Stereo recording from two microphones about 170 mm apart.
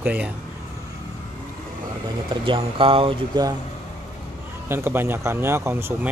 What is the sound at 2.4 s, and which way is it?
Speech, 30° right (ahead or behind).